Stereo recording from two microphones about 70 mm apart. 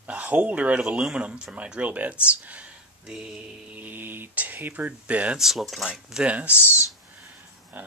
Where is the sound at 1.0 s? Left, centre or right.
Centre.